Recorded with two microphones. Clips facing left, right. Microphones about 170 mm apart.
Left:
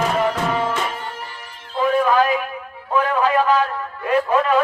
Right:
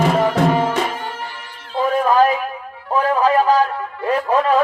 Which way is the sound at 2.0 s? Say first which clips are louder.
Right 3 dB; 40° right (ahead or behind).